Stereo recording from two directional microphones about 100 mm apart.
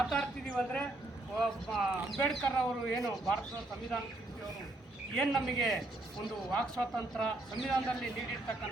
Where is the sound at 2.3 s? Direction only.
10° left (ahead or behind).